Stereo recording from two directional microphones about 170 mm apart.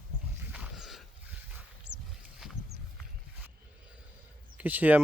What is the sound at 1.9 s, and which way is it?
Boat, 80° right.